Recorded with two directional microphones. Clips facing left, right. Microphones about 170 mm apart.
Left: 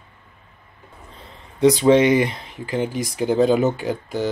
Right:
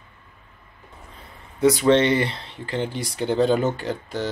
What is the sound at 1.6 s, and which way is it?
Speech, 20° left (ahead or behind).